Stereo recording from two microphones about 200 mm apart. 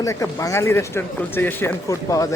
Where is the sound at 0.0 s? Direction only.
15° left (ahead or behind).